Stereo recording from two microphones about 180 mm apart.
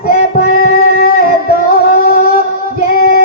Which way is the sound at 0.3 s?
55° left (ahead or behind).